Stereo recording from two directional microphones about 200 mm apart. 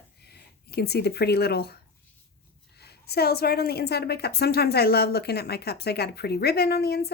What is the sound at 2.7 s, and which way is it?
A woman's voice, 55° left (ahead or behind).